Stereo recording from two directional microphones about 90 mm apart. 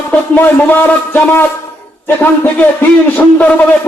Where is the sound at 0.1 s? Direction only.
20° left (ahead or behind).